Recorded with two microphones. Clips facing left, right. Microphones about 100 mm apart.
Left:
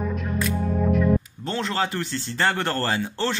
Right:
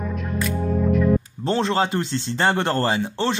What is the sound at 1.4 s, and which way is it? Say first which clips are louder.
Speech: right 5 dB; 30° right (ahead or behind).